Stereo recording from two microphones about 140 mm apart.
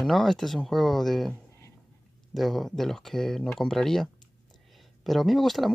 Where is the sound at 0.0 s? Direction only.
Centre (ahead or behind).